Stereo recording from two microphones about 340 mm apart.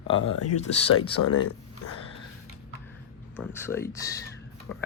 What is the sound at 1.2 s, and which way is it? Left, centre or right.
Speech, left.